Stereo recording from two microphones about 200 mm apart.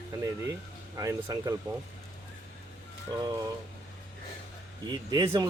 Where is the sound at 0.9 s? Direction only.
15° right (ahead or behind).